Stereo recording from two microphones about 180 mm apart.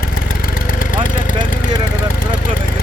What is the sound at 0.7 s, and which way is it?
Vehicle, 50° left (ahead or behind).